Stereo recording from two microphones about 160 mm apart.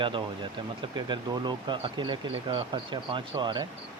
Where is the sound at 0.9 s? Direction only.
30° right (ahead or behind).